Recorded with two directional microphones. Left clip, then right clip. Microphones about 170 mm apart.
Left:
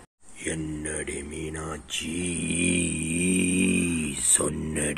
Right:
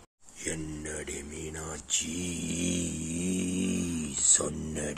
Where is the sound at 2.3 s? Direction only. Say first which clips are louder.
Left 8 dB; 10° right (ahead or behind).